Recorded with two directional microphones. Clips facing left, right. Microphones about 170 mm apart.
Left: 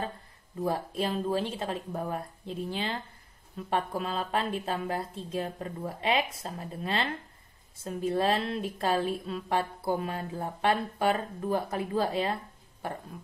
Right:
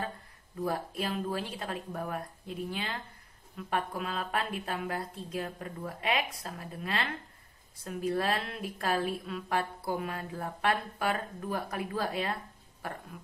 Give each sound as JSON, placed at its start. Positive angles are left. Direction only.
{"t": 0.7, "sound": "a woman's voice", "side_deg": 25}